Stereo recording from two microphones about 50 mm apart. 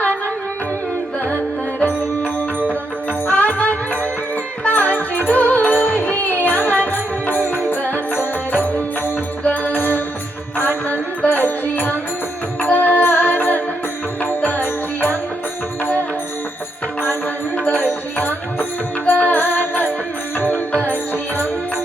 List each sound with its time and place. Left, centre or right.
3.3 s music: left
13.0 s music: left
17.7 s music: left